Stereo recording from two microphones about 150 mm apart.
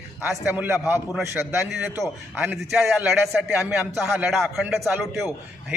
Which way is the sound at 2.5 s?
5° right (ahead or behind).